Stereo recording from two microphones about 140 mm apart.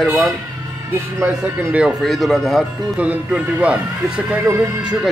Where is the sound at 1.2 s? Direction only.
20° right (ahead or behind).